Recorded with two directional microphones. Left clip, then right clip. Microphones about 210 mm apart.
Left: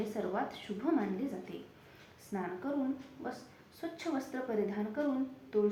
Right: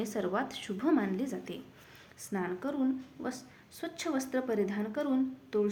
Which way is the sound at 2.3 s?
55° right (ahead or behind).